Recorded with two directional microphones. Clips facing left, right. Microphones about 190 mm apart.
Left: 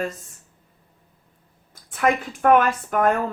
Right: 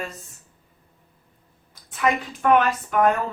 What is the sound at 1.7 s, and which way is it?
Speech, 50° left (ahead or behind).